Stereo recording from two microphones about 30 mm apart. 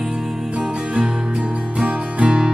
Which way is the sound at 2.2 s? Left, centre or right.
Right.